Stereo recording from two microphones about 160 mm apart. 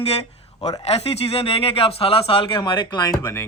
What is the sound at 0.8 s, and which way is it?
Speech, 40° left (ahead or behind).